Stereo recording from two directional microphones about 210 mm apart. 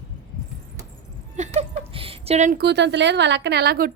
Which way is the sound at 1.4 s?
30° right (ahead or behind).